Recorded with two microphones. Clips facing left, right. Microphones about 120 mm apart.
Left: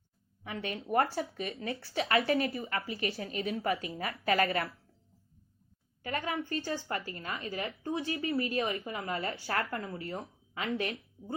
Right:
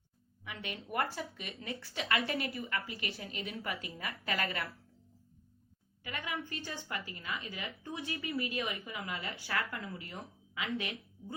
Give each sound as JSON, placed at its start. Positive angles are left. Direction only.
{"t": 0.4, "sound": "a woman's voice", "side_deg": 35}
{"t": 6.0, "sound": "a woman's voice", "side_deg": 40}